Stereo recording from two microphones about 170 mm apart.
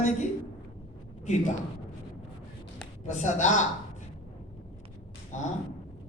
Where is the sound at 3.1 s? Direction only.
45° left (ahead or behind).